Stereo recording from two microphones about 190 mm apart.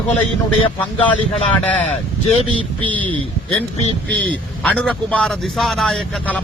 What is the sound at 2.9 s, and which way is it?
A man's voice, 10° left (ahead or behind).